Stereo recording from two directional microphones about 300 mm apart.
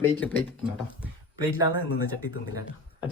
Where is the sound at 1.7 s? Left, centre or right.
Left.